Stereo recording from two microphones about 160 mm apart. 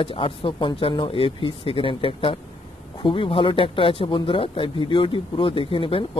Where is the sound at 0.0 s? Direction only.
35° left (ahead or behind).